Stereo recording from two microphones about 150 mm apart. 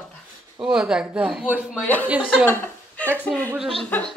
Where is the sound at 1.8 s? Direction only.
10° left (ahead or behind).